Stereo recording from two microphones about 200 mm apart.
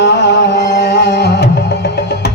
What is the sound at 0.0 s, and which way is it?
Music, 60° left (ahead or behind).